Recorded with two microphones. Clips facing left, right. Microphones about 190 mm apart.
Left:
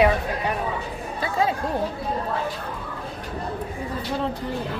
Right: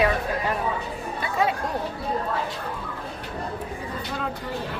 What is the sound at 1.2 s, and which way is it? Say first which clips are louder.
Chatter: left 1 dB; 30° left (ahead or behind).